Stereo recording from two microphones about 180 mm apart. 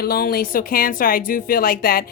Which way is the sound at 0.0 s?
60° left (ahead or behind).